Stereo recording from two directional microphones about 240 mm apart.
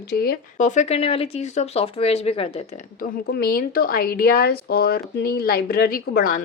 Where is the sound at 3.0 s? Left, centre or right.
Left.